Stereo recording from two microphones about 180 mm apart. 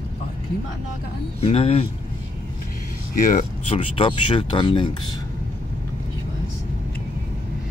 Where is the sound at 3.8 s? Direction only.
30° left (ahead or behind).